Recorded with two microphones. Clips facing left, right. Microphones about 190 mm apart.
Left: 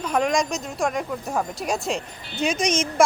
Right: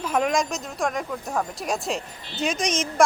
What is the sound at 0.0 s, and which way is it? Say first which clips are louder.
Speech: left 1 dB; 5° right (ahead or behind).